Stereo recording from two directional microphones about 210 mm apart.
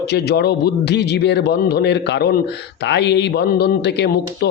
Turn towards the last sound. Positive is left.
turn(degrees=55)  # may be behind; listen again after turning